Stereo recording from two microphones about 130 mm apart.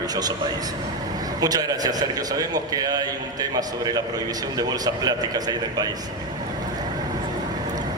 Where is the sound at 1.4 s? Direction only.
30° right (ahead or behind).